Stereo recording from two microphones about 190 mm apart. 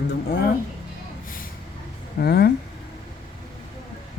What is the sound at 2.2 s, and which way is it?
Speech, 55° left (ahead or behind).